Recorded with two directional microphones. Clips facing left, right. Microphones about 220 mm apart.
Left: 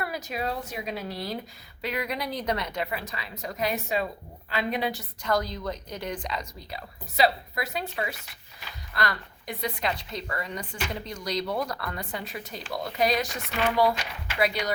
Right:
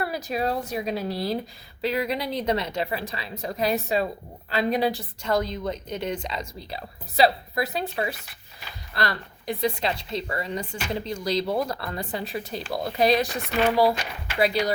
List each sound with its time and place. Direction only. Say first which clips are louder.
0.0 s a woman's voice: right 5 dB; 35° right (ahead or behind)